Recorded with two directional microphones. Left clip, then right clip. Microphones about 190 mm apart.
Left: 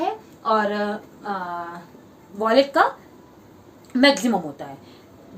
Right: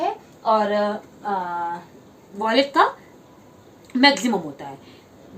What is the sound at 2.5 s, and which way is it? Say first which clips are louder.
Speech: left 1 dB; 10° left (ahead or behind).